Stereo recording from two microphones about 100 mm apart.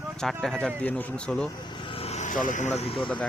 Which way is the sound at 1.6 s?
55° left (ahead or behind).